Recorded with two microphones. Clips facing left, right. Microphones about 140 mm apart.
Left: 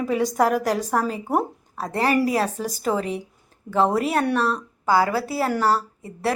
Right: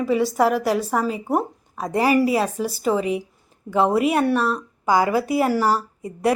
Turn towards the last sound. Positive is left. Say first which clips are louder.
# right 4 dB
turn(degrees=-15)  # may be behind; listen again after turning